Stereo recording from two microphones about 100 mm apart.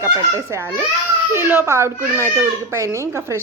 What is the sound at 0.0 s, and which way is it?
Speech, 25° right (ahead or behind).